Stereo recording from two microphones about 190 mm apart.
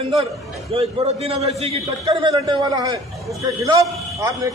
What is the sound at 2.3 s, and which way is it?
Speech, 20° right (ahead or behind).